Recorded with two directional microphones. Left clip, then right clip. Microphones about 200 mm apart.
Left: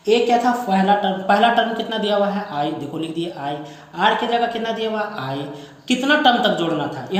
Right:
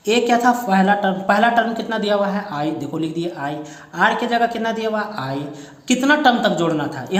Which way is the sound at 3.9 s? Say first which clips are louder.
Right 1 dB; 40° right (ahead or behind).